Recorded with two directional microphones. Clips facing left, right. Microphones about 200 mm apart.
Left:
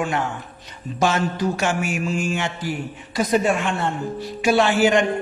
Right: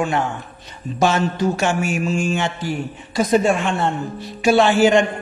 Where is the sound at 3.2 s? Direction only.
30° right (ahead or behind).